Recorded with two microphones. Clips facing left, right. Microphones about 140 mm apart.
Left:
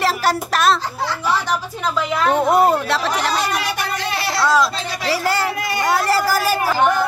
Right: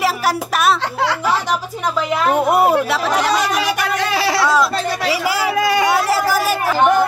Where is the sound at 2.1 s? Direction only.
5° right (ahead or behind).